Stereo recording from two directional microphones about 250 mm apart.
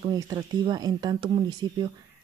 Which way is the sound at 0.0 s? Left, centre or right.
Centre.